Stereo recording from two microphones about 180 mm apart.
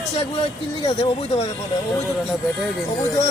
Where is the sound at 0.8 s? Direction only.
20° left (ahead or behind).